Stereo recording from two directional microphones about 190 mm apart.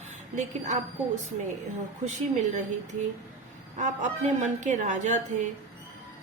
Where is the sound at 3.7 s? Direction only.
40° right (ahead or behind).